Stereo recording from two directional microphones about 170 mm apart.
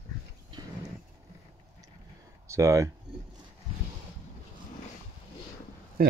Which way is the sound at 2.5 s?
20° right (ahead or behind).